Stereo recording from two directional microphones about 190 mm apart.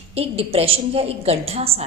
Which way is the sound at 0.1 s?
30° right (ahead or behind).